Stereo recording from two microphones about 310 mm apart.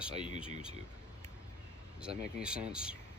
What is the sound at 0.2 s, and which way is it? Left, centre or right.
Speech, centre.